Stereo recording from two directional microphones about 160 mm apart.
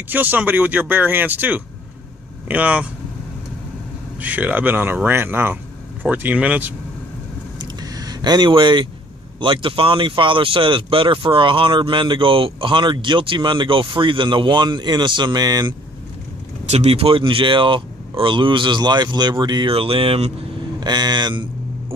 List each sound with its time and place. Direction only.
0.1 s speech: 10° right (ahead or behind)
4.2 s speech: 10° right (ahead or behind)
7.6 s vehicle: 25° right (ahead or behind)
9.4 s speech: 30° right (ahead or behind)
16.6 s speech: 40° right (ahead or behind)
20.8 s speech: 25° right (ahead or behind)